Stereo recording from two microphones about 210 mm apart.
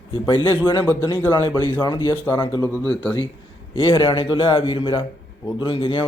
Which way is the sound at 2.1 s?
10° left (ahead or behind).